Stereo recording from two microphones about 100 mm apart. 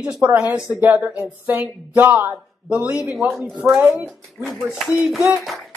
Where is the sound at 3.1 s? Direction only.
Centre (ahead or behind).